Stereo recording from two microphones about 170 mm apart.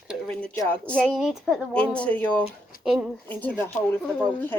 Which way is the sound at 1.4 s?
5° left (ahead or behind).